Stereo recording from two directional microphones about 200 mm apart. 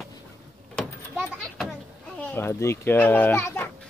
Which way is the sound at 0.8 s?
Centre (ahead or behind).